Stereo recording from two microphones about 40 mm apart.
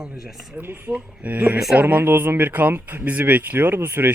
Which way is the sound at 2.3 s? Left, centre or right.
Right.